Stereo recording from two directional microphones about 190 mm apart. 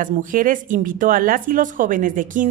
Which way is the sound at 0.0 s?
45° right (ahead or behind).